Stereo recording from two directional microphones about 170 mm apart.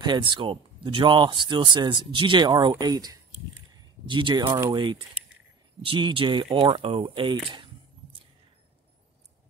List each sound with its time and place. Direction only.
0.0 s speech: 25° right (ahead or behind)
2.7 s a sound: 20° right (ahead or behind)
4.1 s speech: 25° right (ahead or behind)